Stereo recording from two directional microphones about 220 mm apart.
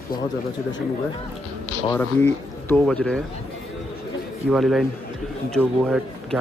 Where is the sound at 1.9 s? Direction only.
10° left (ahead or behind).